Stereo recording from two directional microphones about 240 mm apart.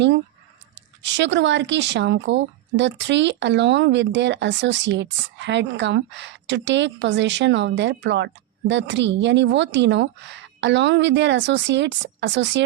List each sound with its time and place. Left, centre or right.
1.0 s speech: right